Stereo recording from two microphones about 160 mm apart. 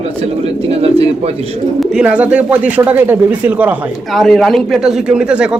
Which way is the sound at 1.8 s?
5° right (ahead or behind).